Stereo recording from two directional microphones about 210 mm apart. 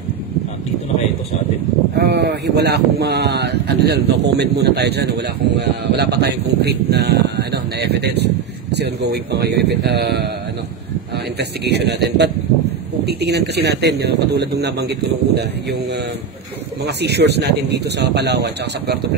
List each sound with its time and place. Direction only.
2.0 s speech: 50° right (ahead or behind)
11.3 s speech: 50° right (ahead or behind)
13.0 s speech: 50° right (ahead or behind)